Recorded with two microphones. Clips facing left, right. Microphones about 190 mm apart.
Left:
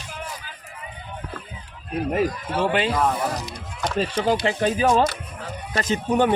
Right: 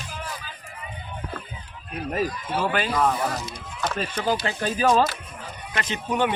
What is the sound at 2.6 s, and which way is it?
Speech, 25° left (ahead or behind).